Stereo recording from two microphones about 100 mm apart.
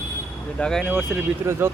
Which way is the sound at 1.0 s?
25° right (ahead or behind).